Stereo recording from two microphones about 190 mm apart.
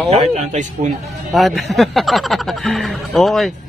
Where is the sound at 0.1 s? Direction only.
35° right (ahead or behind).